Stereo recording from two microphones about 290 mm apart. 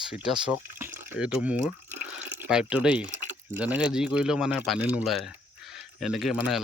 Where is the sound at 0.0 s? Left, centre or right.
Centre.